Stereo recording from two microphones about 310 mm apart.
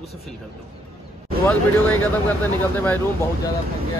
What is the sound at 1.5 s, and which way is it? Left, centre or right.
Speech, centre.